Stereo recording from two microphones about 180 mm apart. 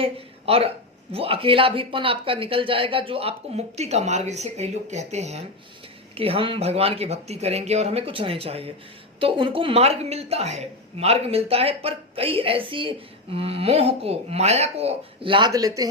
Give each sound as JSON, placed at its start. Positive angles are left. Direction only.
{"t": 0.0, "sound": "a woman's voice", "side_deg": -30}